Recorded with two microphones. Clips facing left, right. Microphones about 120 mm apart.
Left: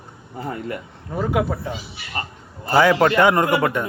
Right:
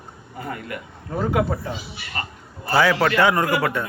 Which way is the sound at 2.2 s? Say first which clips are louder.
Left 2 dB; 25° left (ahead or behind).